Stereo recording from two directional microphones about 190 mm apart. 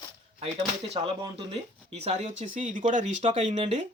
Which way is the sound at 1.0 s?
30° right (ahead or behind).